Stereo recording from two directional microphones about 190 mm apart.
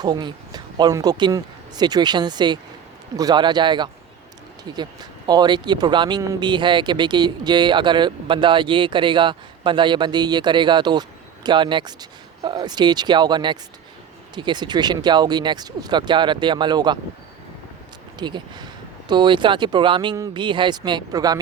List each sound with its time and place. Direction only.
0.0 s speech: 20° right (ahead or behind)
18.2 s speech: 25° right (ahead or behind)